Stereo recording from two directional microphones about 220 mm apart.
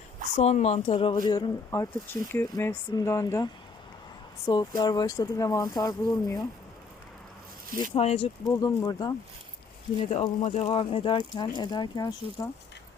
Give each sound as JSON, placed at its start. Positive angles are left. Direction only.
{"t": 0.3, "sound": "speech", "side_deg": 30}
{"t": 7.9, "sound": "speech", "side_deg": 30}
{"t": 8.4, "sound": "speech", "side_deg": 15}
{"t": 10.0, "sound": "speech", "side_deg": 30}